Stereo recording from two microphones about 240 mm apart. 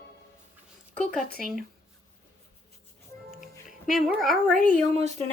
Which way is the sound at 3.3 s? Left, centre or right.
Centre.